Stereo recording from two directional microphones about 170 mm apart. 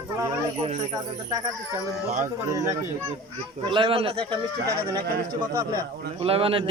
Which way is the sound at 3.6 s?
30° right (ahead or behind).